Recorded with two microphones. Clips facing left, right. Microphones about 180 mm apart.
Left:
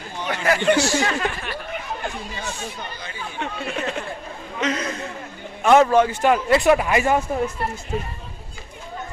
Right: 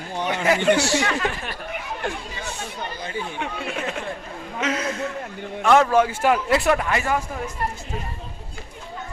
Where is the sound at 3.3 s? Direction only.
10° right (ahead or behind); by 7.2 s 15° left (ahead or behind).